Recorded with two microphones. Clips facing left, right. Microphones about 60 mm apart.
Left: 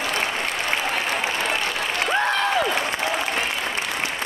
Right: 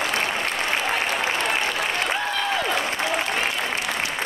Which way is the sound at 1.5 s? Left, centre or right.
Centre.